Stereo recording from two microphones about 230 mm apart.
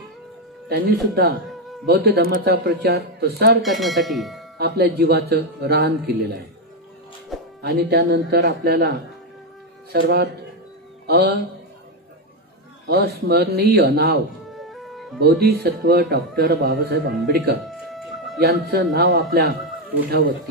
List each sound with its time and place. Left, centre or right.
0.7 s speech: right
3.6 s speech: centre
4.6 s speech: right
7.6 s speech: right
9.9 s speech: right
12.8 s speech: right
14.5 s music: centre
15.4 s speech: right
17.6 s music: centre
18.7 s speech: right